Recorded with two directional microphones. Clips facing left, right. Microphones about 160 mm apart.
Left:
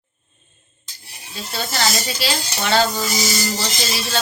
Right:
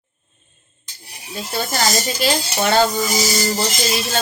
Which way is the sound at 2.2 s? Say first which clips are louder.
Right 7 dB; 50° right (ahead or behind).